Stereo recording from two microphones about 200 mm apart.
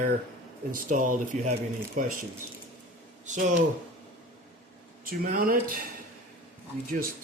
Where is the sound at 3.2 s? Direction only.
40° right (ahead or behind).